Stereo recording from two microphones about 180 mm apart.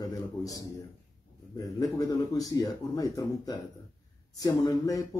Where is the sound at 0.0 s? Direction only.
20° left (ahead or behind).